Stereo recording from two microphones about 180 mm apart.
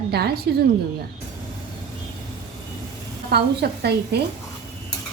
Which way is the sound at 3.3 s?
65° right (ahead or behind).